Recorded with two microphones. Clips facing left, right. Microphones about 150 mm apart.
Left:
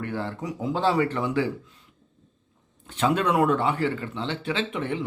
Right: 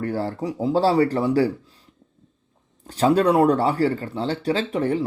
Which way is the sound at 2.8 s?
35° right (ahead or behind).